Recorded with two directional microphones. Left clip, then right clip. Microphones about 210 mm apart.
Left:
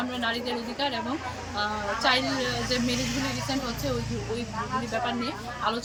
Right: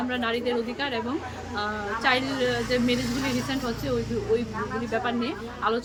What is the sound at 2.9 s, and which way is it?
Speech, 30° right (ahead or behind).